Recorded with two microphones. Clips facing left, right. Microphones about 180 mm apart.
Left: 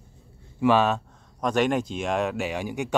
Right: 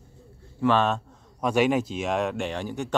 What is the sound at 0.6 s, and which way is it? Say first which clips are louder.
A man's voice: left 2 dB; 5° left (ahead or behind).